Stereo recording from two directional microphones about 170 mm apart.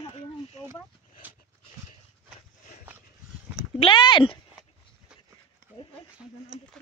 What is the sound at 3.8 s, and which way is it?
Speech, 30° left (ahead or behind).